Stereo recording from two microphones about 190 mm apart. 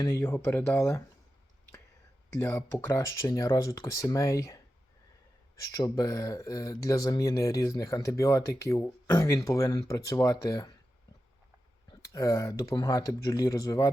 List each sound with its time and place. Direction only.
0.0 s speech: 10° left (ahead or behind)
2.3 s speech: 15° left (ahead or behind)
5.7 s speech: 20° left (ahead or behind)
11.9 s speech: 20° left (ahead or behind)